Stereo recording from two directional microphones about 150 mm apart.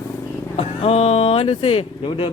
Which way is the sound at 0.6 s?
40° left (ahead or behind).